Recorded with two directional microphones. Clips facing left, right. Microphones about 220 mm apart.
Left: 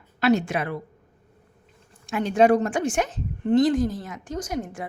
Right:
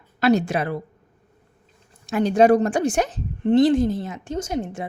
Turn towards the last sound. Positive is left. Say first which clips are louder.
# right 3 dB
turn(degrees=-25)  # may be behind; listen again after turning